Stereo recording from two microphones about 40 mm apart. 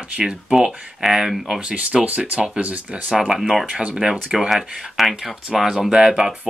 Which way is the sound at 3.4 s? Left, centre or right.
Centre.